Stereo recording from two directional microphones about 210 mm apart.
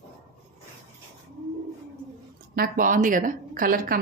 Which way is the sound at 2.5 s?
45° right (ahead or behind).